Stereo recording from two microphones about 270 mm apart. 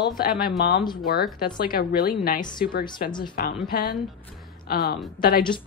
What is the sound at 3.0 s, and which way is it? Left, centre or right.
Speech, centre.